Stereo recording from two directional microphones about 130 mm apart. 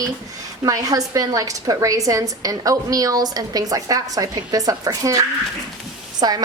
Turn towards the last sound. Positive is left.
turn(degrees=-30)  # may be behind; listen again after turning